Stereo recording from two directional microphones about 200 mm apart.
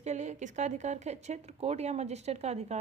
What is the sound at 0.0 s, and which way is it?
A woman's voice, 35° right (ahead or behind).